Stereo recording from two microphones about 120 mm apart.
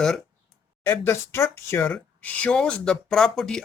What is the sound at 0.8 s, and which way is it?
Speech, 20° left (ahead or behind).